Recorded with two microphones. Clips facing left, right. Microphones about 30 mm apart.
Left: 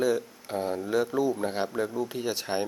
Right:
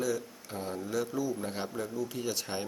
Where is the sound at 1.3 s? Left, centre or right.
Left.